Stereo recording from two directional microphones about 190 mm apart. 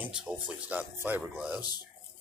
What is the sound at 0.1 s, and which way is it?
Speech, 5° right (ahead or behind).